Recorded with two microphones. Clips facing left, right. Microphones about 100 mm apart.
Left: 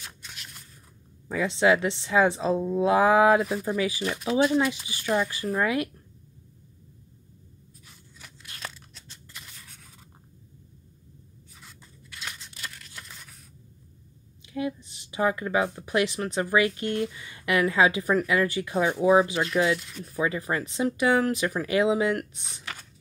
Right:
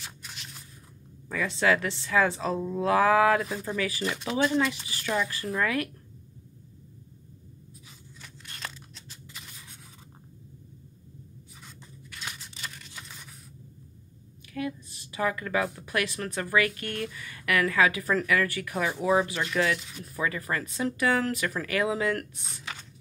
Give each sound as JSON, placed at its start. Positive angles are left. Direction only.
{"t": 0.0, "sound": "a sound", "side_deg": 0}
{"t": 1.3, "sound": "speech", "side_deg": 20}
{"t": 4.0, "sound": "speech", "side_deg": 5}
{"t": 4.8, "sound": "speech", "side_deg": 15}
{"t": 8.2, "sound": "a sound", "side_deg": 5}
{"t": 11.6, "sound": "tearing", "side_deg": 0}
{"t": 14.5, "sound": "speech", "side_deg": 20}
{"t": 18.9, "sound": "speech", "side_deg": 0}
{"t": 19.5, "sound": "speech", "side_deg": 20}
{"t": 19.8, "sound": "speech", "side_deg": 0}
{"t": 20.2, "sound": "speech", "side_deg": 20}